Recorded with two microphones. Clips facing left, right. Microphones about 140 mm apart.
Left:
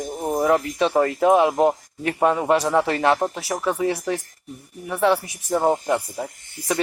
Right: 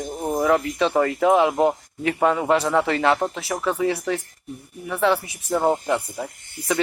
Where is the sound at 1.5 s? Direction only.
15° left (ahead or behind).